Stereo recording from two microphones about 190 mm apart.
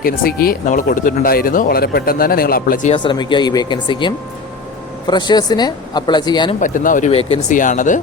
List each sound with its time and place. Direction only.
0.0 s speech: 50° left (ahead or behind)
2.9 s speech: 25° left (ahead or behind)
6.6 s speech: 45° left (ahead or behind)
7.1 s speech: 30° left (ahead or behind)